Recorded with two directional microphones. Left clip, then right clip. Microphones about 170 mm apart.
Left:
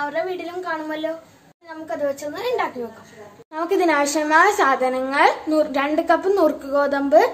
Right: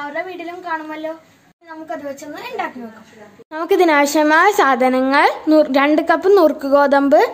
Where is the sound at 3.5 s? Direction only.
65° right (ahead or behind).